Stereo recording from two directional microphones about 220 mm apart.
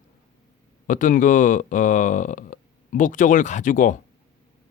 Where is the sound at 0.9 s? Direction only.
35° left (ahead or behind).